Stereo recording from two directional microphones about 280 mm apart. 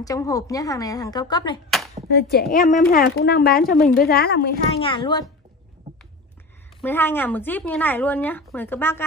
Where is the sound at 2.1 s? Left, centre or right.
Left.